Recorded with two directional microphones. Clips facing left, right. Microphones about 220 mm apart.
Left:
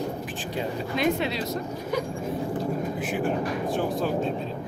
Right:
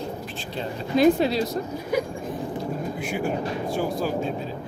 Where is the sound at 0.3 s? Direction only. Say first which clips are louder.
Left 1 dB; 15° left (ahead or behind).